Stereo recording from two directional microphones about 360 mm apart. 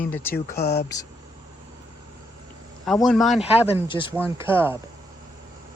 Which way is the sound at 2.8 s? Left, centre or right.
Centre.